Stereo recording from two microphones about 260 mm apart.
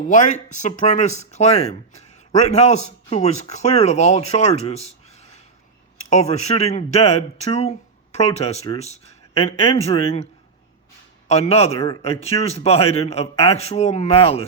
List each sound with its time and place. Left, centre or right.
0.1 s speech: left
6.1 s speech: left
11.3 s speech: left